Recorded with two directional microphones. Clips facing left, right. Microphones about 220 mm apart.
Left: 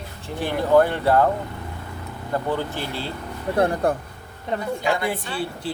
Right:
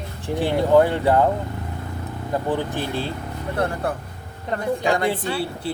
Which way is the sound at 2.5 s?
15° right (ahead or behind).